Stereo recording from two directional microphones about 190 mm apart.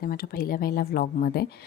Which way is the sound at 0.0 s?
50° left (ahead or behind).